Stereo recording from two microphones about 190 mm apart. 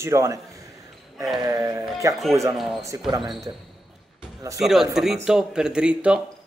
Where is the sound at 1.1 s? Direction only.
Centre (ahead or behind).